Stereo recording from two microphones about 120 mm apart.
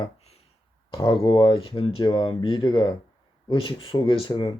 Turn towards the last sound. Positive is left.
turn(degrees=40)  # may be behind; listen again after turning